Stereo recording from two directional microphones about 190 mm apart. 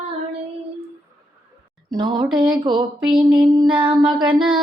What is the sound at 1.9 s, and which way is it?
Music, 25° right (ahead or behind).